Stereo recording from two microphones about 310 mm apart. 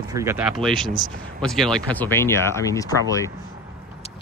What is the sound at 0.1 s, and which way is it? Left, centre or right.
Speech, centre.